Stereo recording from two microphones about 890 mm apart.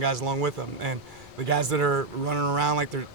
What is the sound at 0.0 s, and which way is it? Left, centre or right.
Speech, right.